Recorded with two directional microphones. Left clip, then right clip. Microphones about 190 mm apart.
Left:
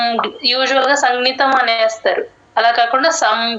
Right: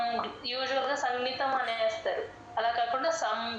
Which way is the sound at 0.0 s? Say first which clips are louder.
Left 15 dB; 55° left (ahead or behind).